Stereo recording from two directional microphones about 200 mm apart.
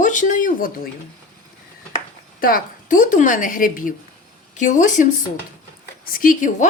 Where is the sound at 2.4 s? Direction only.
45° left (ahead or behind).